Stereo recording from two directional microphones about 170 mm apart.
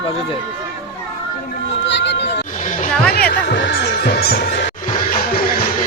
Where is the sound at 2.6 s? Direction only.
45° left (ahead or behind).